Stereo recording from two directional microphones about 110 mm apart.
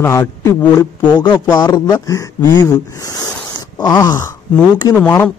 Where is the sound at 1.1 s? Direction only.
45° left (ahead or behind).